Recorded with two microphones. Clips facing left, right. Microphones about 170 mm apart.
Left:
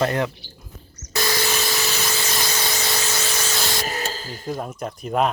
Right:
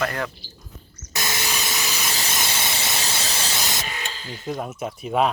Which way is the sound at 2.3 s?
25° right (ahead or behind).